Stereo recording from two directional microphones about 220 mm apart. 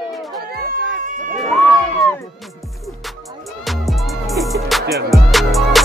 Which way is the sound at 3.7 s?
Centre (ahead or behind).